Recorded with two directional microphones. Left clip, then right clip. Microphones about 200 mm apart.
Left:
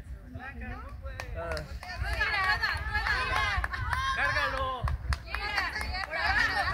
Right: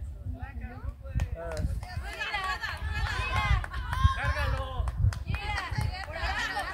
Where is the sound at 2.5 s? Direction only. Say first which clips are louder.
Left 5 dB; 15° right (ahead or behind).